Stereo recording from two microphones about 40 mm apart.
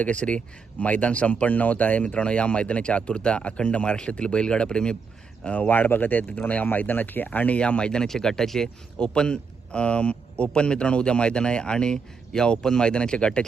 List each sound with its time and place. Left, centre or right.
0.0 s speech: left
2.0 s speech: left
5.6 s speech: left
7.3 s speech: left
7.6 s speech: left
8.0 s speech: centre
9.0 s speech: left